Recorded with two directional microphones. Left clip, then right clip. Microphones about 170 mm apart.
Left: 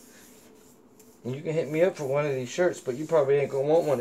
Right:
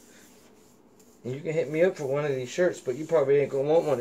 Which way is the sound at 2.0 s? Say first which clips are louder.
Left 1 dB; 20° right (ahead or behind).